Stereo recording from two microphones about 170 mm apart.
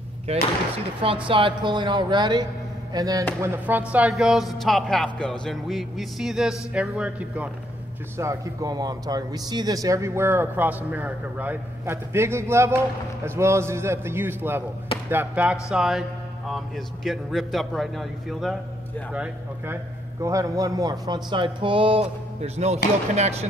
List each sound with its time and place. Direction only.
0.3 s speech: 35° right (ahead or behind); by 7.5 s 5° right (ahead or behind)
8.2 s speech: 20° right (ahead or behind); by 22.8 s 40° right (ahead or behind)